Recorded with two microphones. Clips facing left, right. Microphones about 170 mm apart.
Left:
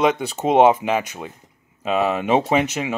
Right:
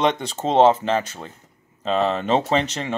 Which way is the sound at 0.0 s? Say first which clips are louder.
Left 2 dB; 5° left (ahead or behind).